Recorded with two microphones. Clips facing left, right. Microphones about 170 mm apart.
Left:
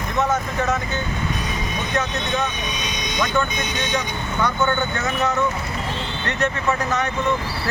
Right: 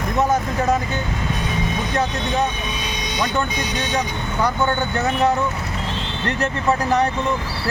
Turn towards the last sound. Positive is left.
turn(degrees=-35)  # may be behind; listen again after turning